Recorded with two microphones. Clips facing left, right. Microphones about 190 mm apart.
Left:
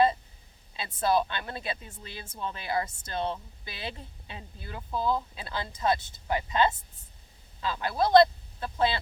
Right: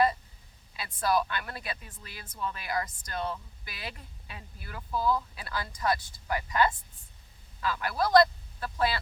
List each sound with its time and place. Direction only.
0.8 s speech: 25° left (ahead or behind)